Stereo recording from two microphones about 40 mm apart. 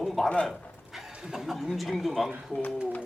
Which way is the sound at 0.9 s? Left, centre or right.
Centre.